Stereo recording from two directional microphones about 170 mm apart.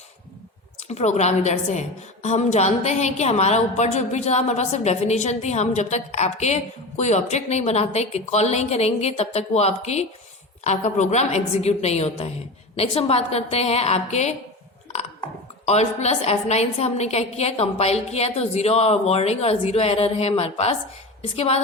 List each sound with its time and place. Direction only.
0.9 s a woman's voice: 40° left (ahead or behind)
15.6 s a woman's voice: 40° left (ahead or behind)